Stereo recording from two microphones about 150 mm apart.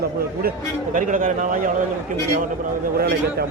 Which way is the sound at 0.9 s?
60° right (ahead or behind).